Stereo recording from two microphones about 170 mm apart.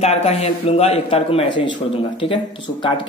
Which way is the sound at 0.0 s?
40° left (ahead or behind).